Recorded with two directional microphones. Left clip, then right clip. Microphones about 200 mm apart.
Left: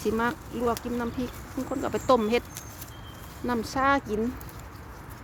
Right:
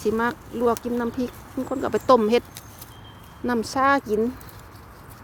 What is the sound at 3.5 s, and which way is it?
Speech, 30° right (ahead or behind).